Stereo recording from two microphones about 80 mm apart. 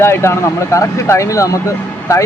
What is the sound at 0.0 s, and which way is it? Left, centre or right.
Speech, left.